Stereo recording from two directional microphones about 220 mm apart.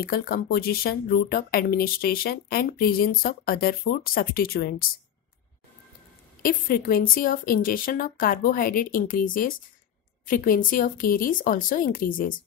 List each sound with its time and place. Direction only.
0.0 s speech: 40° left (ahead or behind)
6.4 s a woman's voice: 40° left (ahead or behind)